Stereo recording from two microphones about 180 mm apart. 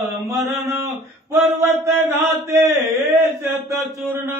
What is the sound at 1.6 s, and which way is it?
Mantra, 15° right (ahead or behind).